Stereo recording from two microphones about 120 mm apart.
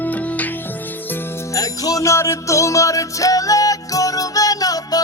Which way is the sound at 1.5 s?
30° left (ahead or behind).